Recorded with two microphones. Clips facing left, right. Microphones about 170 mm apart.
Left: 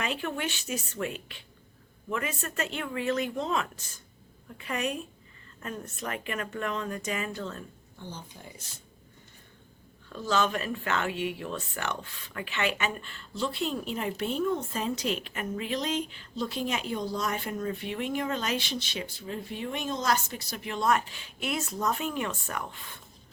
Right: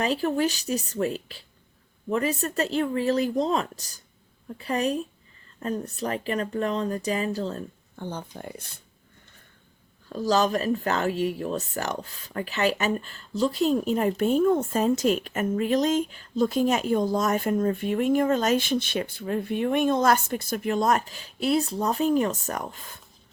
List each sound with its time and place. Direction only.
0.0 s speech: 35° right (ahead or behind)
7.9 s speech: 55° right (ahead or behind)
10.1 s speech: 40° right (ahead or behind)